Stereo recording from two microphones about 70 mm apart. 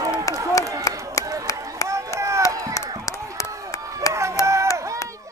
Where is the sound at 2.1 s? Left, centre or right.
Right.